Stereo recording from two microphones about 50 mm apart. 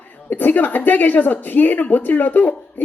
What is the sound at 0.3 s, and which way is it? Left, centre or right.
A woman's voice, left.